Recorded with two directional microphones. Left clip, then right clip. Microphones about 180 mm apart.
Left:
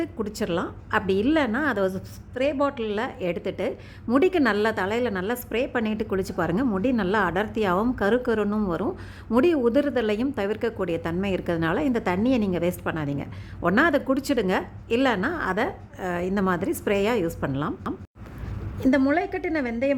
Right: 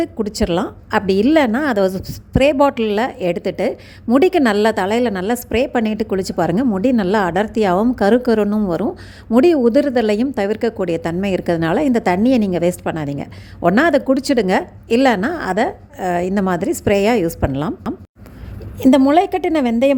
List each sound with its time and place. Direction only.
0.0 s a woman's voice: 25° right (ahead or behind)